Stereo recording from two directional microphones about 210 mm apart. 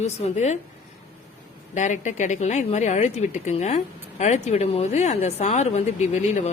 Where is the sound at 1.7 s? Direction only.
35° left (ahead or behind).